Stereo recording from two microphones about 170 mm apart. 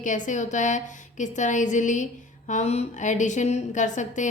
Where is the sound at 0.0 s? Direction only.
50° left (ahead or behind).